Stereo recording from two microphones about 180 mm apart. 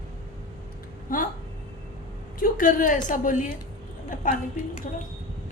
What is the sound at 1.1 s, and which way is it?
Speech, 50° left (ahead or behind).